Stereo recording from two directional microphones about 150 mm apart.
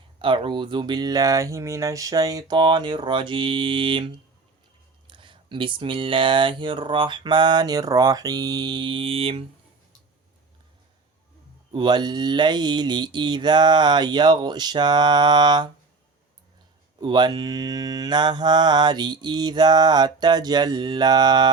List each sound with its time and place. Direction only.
0.2 s a sound: 35° right (ahead or behind)
11.7 s mantra: 30° right (ahead or behind)
17.0 s mantra: 30° right (ahead or behind)